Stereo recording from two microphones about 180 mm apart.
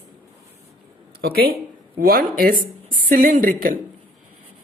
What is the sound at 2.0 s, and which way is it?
Speech, 55° right (ahead or behind).